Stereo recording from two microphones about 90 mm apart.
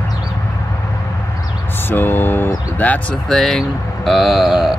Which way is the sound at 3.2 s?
5° left (ahead or behind).